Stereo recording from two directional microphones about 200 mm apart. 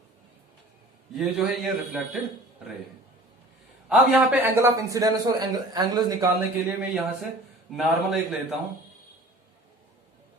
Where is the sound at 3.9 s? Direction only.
5° right (ahead or behind).